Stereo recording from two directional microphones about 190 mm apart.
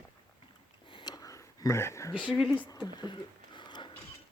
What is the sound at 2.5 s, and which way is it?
Speech, 10° left (ahead or behind).